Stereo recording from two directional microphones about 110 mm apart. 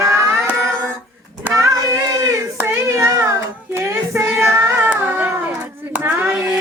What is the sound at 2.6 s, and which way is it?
Child singing, 20° right (ahead or behind).